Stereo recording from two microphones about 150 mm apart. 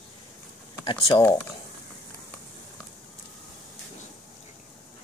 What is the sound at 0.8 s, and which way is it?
Speech, 30° left (ahead or behind).